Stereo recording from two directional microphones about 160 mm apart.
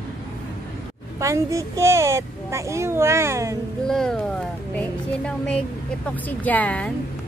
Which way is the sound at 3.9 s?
5° left (ahead or behind).